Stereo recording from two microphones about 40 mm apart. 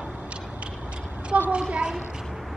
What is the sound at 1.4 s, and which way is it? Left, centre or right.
Speech, right.